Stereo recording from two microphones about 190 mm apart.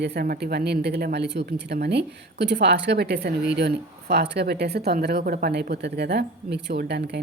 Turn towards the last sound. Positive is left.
turn(degrees=-65)  # may be behind; listen again after turning